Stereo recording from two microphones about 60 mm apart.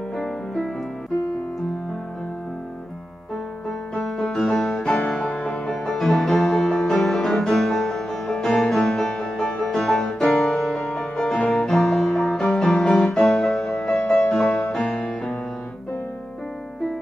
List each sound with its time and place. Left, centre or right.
3.9 s music: centre
5.2 s music: left
5.9 s music: centre